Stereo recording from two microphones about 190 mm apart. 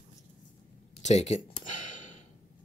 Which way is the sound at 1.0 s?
35° left (ahead or behind).